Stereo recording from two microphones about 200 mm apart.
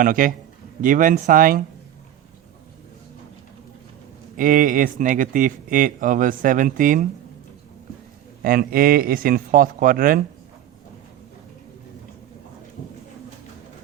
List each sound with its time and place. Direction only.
0.0 s a man's voice: 45° right (ahead or behind)
4.4 s speech: 40° right (ahead or behind)
8.4 s a man's voice: 45° right (ahead or behind)